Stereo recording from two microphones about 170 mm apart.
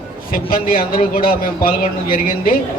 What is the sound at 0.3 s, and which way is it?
A man's voice, 60° left (ahead or behind).